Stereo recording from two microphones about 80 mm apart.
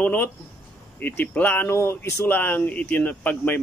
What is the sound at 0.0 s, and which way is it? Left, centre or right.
Speech, left.